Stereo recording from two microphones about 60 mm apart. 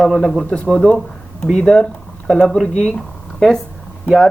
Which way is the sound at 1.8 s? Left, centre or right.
Centre.